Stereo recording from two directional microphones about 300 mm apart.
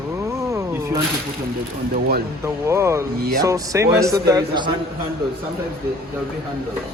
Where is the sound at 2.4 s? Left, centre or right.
Centre.